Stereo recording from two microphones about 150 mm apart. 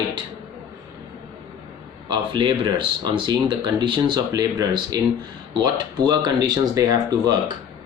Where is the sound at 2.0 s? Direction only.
30° right (ahead or behind).